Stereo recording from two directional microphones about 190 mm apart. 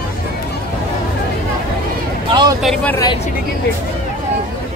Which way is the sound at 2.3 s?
20° right (ahead or behind).